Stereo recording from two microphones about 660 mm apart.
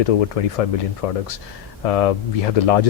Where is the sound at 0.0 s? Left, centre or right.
Left.